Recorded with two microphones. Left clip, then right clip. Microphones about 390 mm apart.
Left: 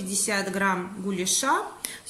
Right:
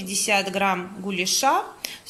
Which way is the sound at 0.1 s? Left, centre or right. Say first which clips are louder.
Right 5 dB; centre.